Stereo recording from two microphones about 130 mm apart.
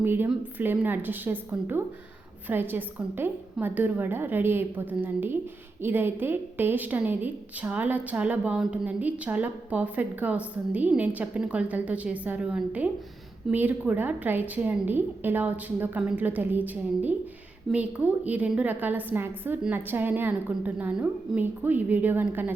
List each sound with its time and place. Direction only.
0.0 s a woman's voice: 15° right (ahead or behind)